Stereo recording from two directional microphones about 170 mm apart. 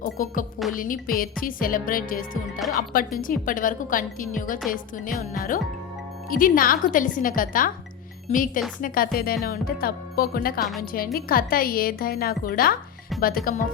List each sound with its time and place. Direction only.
0.0 s a woman's voice: 50° left (ahead or behind)
10.6 s a woman's voice: centre (ahead or behind)
10.9 s speech: 60° left (ahead or behind)